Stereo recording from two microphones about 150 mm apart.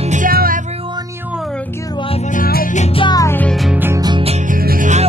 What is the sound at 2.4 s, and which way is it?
Music, 80° left.